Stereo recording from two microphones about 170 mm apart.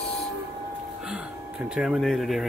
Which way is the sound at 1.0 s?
5° right (ahead or behind).